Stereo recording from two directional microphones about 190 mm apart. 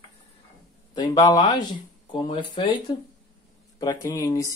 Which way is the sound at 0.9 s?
20° left (ahead or behind).